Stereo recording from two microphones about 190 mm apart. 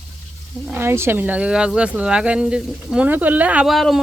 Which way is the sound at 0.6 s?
10° right (ahead or behind).